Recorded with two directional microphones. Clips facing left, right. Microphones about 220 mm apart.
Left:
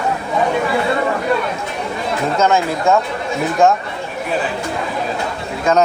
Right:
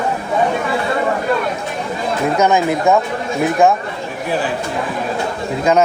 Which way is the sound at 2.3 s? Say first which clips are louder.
Right 1 dB; 15° right (ahead or behind).